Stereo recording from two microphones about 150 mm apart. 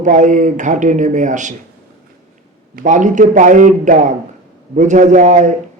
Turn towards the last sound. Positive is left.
turn(degrees=-55)  # may be behind; listen again after turning